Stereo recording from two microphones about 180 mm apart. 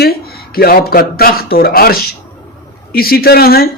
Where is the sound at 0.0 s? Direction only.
60° left (ahead or behind).